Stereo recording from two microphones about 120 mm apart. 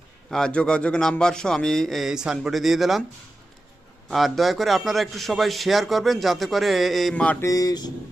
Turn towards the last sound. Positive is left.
turn(degrees=35)  # may be behind; listen again after turning